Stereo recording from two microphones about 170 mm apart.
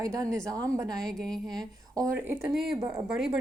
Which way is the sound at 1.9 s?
15° right (ahead or behind).